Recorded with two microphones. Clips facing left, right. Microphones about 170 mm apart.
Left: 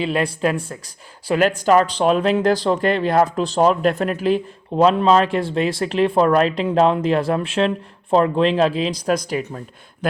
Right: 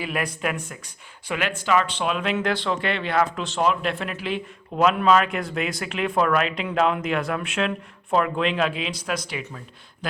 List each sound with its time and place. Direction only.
0.0 s speech: 30° left (ahead or behind)